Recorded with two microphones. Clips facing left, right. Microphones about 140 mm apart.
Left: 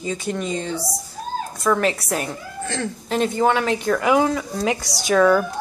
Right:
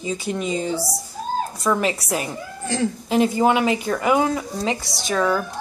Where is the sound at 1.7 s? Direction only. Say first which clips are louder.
Left 2 dB; 10° right (ahead or behind).